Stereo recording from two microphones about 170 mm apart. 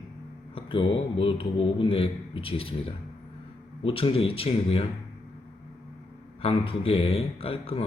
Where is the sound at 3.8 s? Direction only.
30° left (ahead or behind).